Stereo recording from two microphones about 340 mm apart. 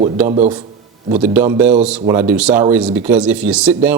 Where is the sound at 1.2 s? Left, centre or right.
Centre.